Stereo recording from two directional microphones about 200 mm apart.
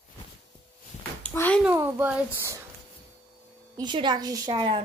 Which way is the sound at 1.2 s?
10° left (ahead or behind).